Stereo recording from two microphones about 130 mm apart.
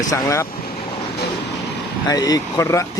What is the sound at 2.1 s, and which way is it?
Speech, 30° left (ahead or behind).